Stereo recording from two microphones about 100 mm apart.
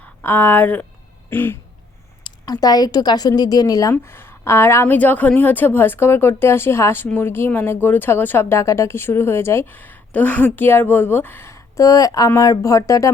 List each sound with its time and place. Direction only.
0.0 s speech: 20° left (ahead or behind)
2.2 s a woman's voice: 40° left (ahead or behind)
3.9 s speech: 20° left (ahead or behind)
4.9 s a woman's voice: 15° left (ahead or behind); by 13.1 s 30° left (ahead or behind)